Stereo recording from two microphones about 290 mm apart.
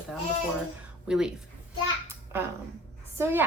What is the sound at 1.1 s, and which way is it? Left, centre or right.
Speech, centre.